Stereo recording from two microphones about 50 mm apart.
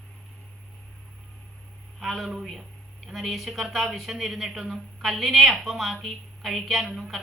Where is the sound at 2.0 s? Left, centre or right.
Centre.